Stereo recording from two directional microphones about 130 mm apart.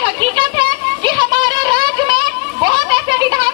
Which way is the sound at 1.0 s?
35° right (ahead or behind).